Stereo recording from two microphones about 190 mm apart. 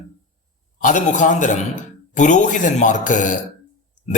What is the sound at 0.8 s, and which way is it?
Speech, 40° left (ahead or behind).